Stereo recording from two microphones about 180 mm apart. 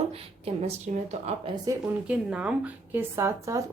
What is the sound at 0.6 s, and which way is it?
Speech, 35° right (ahead or behind).